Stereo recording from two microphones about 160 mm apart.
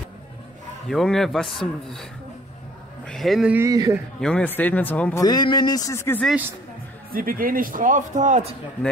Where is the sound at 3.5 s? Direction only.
20° right (ahead or behind).